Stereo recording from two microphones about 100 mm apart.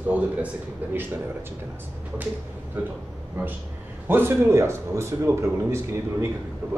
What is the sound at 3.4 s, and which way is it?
Speech, 20° right (ahead or behind).